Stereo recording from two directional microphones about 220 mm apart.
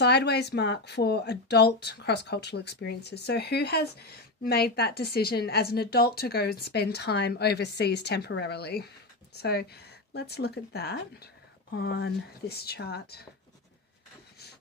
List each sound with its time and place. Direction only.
0.0 s speech: 50° left (ahead or behind)